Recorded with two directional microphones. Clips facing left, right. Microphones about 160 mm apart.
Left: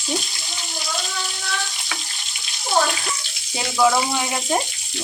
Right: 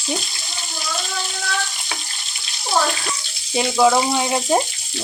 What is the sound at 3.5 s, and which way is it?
Speech, 20° right (ahead or behind).